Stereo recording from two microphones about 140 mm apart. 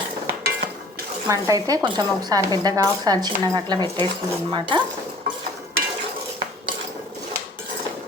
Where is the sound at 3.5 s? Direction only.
30° right (ahead or behind).